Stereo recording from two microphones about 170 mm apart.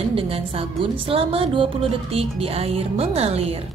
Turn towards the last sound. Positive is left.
turn(degrees=-35)  # may be behind; listen again after turning